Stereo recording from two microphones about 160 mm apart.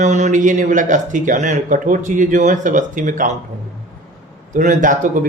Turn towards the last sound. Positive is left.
turn(degrees=-55)  # may be behind; listen again after turning